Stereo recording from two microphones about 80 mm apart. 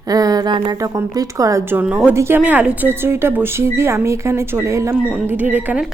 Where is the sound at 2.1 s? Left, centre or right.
Right.